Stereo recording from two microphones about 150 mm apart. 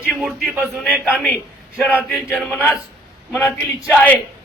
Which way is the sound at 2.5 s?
10° left (ahead or behind).